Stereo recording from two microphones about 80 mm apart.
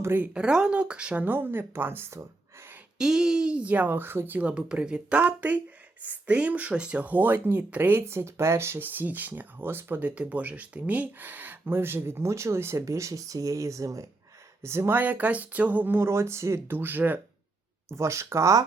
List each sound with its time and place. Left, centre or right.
0.0 s speech: right
0.3 s speech: centre
1.2 s speech: right
3.0 s speech: centre; by 14.9 s right
14.9 s speech: right
16.7 s speech: right
17.8 s speech: right